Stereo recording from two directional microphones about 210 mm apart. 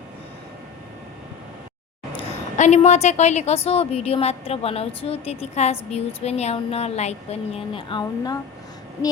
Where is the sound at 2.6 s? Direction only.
35° left (ahead or behind).